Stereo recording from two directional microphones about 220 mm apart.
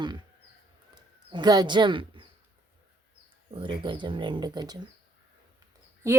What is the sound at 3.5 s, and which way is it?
A woman's voice, 20° right (ahead or behind).